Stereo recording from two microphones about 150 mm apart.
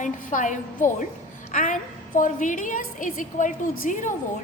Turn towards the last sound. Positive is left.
turn(degrees=60)  # may be behind; listen again after turning